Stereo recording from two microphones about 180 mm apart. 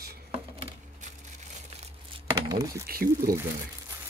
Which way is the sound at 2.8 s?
55° right (ahead or behind).